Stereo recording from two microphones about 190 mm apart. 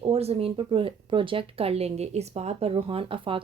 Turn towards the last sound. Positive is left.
turn(degrees=-30)  # may be behind; listen again after turning